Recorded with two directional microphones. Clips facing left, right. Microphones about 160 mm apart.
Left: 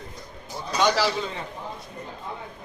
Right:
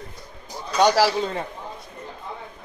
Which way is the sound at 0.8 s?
45° right (ahead or behind).